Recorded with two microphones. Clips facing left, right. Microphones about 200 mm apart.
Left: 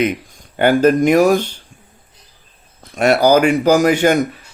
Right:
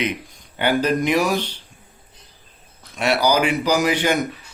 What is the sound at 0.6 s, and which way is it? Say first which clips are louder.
Speech: left 7 dB; 50° left (ahead or behind).